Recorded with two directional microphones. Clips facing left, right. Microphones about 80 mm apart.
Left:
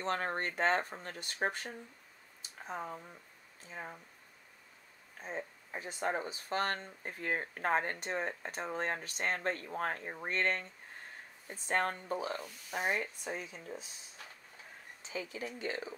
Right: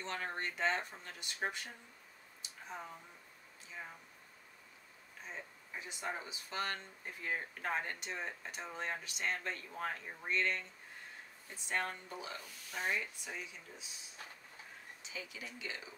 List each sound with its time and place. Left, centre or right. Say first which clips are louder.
0.0 s speech: left 6 dB; left
2.4 s a sound: left 6 dB; left
3.6 s speech: left 4 dB; left
5.2 s speech: left 7 dB; left
15.0 s speech: left 8 dB; left